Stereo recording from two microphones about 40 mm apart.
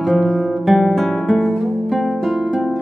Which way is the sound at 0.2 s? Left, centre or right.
Left.